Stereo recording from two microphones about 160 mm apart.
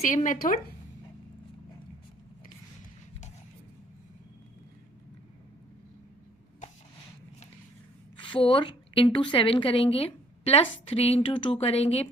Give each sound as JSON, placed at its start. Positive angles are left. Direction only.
{"t": 0.1, "sound": "speech", "side_deg": 55}
{"t": 8.1, "sound": "a woman's voice", "side_deg": 30}